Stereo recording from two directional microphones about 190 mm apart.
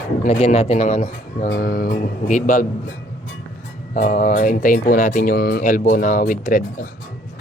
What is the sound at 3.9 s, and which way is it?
Speech, 45° left (ahead or behind).